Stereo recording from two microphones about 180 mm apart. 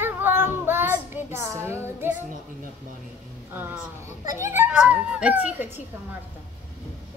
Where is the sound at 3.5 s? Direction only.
10° right (ahead or behind).